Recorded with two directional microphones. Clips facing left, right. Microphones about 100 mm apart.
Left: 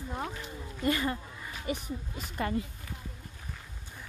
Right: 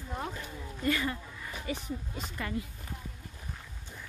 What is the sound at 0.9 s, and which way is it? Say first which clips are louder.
Speech: left 1 dB; 25° left (ahead or behind).